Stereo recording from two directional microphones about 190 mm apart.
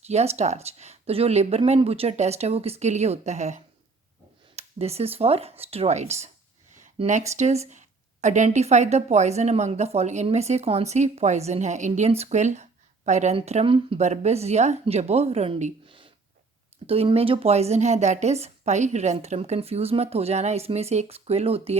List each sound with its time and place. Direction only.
0.0 s speech: 35° right (ahead or behind)